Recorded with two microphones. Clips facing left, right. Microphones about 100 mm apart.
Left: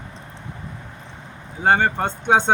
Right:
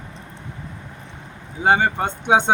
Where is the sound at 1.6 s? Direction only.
10° right (ahead or behind).